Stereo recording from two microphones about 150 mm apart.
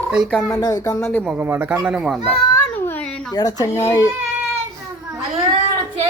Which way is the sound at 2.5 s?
15° left (ahead or behind).